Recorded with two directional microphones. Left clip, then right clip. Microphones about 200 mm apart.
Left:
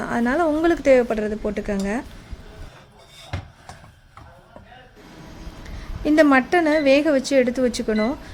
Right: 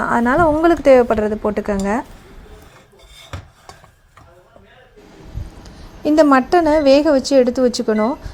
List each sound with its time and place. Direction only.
0.0 s a woman's voice: centre (ahead or behind)
0.7 s a woman's voice: 10° right (ahead or behind)
6.0 s a woman's voice: 15° right (ahead or behind)